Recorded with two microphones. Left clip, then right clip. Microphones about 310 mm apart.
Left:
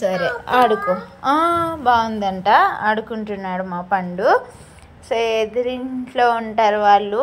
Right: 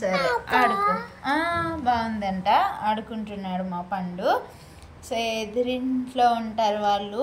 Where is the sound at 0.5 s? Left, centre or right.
Centre.